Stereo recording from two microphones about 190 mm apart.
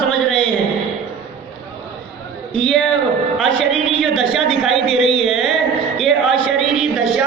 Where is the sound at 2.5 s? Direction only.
5° left (ahead or behind).